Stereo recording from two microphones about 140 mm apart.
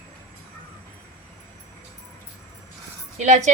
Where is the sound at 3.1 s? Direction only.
60° right (ahead or behind).